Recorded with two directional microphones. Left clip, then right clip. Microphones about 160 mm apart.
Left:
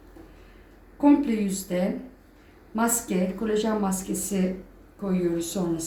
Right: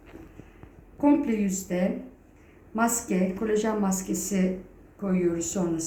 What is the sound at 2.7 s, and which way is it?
A woman's voice, 25° left (ahead or behind).